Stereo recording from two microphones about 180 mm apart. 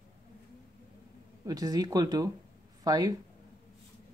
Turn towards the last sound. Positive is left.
turn(degrees=-20)  # may be behind; listen again after turning